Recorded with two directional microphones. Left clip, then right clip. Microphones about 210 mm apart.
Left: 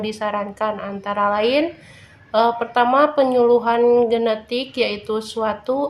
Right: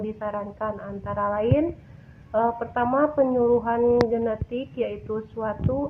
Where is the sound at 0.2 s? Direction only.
35° left (ahead or behind).